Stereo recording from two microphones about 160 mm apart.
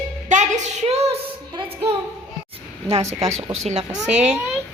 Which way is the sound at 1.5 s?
30° right (ahead or behind).